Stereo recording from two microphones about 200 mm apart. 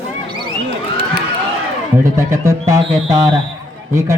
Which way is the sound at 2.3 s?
15° right (ahead or behind).